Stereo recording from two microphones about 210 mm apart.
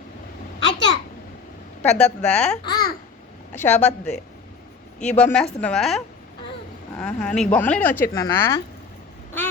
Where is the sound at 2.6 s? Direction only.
20° left (ahead or behind).